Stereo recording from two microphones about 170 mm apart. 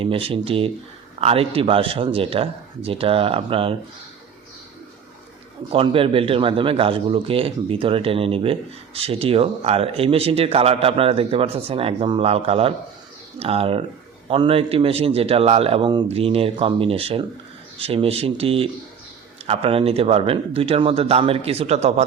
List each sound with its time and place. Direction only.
0.0 s a man's voice: 35° right (ahead or behind)
5.7 s a man's voice: 30° right (ahead or behind)